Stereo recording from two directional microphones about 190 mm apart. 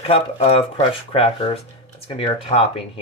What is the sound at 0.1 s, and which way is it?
Speech, 30° left (ahead or behind).